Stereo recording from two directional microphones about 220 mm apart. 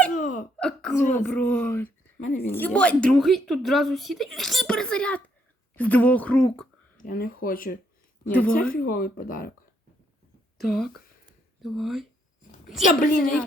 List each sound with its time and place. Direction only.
0.1 s hiccup: 35° left (ahead or behind)
0.5 s hiccup: 5° left (ahead or behind)
1.2 s a woman's voice: 5° left (ahead or behind)
7.0 s speech: 40° left (ahead or behind)
8.2 s speech: 5° left (ahead or behind)
8.7 s speech: 40° left (ahead or behind)
10.6 s a woman's voice: centre (ahead or behind)
12.9 s speech: 40° left (ahead or behind)